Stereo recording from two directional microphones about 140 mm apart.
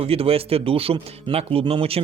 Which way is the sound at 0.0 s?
45° right (ahead or behind).